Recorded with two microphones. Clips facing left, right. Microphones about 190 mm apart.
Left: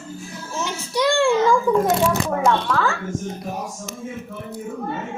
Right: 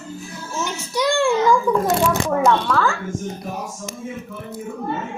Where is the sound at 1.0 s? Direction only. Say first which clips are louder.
Left 1 dB; 30° left (ahead or behind).